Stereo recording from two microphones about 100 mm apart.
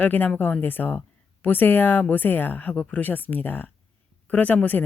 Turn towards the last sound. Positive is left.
turn(degrees=15)  # may be behind; listen again after turning